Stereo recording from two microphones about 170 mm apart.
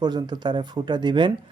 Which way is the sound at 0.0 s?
25° right (ahead or behind).